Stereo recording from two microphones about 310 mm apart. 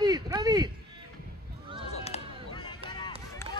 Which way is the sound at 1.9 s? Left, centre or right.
Centre.